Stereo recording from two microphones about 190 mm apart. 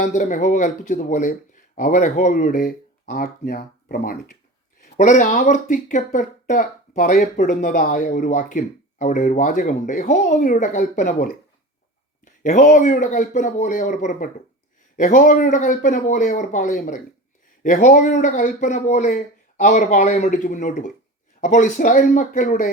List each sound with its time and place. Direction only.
0.0 s speech: 40° left (ahead or behind)